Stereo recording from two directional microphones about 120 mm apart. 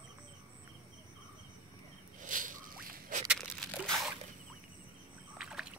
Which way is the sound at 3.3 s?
Centre (ahead or behind).